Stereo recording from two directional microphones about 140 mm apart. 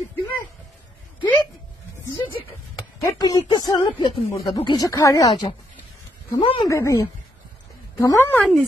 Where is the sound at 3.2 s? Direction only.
30° left (ahead or behind).